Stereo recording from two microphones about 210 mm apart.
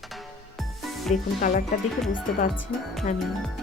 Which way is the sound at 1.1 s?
40° left (ahead or behind).